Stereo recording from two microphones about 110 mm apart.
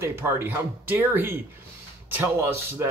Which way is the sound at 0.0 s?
20° right (ahead or behind).